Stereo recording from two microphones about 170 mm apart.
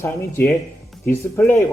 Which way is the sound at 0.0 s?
10° left (ahead or behind).